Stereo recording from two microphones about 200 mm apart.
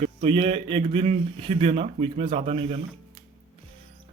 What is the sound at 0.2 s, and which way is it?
Speech, 25° right (ahead or behind).